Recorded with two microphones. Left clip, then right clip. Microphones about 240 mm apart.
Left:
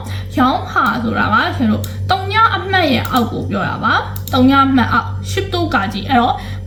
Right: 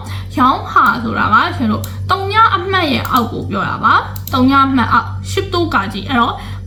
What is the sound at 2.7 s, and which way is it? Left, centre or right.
Speech, centre.